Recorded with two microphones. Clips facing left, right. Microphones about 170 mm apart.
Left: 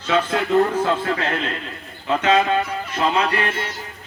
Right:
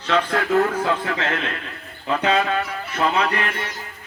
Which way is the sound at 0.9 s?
20° left (ahead or behind).